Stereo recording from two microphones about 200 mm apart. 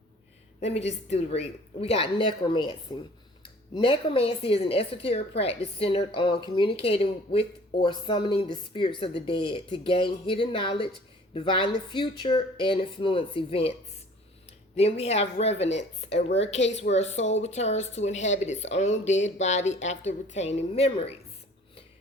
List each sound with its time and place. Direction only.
0.6 s speech: 30° left (ahead or behind)
14.8 s speech: 30° left (ahead or behind)
16.9 s speech: 35° left (ahead or behind)